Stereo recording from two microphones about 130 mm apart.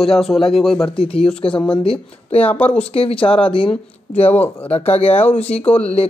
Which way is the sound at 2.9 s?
45° left (ahead or behind).